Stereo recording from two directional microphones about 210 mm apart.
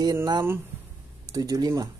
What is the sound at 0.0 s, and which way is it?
Speech, 15° right (ahead or behind).